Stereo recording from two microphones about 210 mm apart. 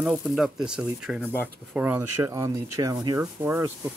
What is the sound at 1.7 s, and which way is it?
Speech, 5° right (ahead or behind).